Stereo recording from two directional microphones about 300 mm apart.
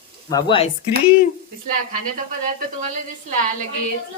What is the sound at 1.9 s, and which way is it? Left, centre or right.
A woman's voice, right.